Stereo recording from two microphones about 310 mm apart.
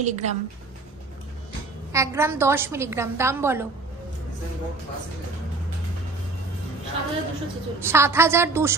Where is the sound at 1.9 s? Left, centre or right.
Centre.